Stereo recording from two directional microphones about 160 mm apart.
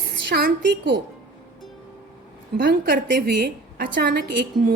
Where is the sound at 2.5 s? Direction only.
65° right (ahead or behind).